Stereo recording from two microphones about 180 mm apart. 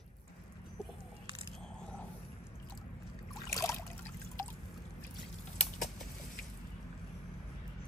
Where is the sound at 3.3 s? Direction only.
20° left (ahead or behind).